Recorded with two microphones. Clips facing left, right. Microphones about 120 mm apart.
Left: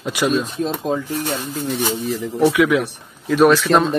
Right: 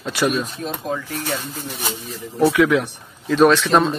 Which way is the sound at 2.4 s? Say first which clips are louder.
Even; 10° left (ahead or behind).